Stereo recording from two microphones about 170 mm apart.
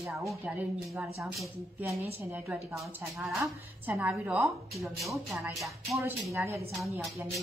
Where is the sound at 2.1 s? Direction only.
10° right (ahead or behind).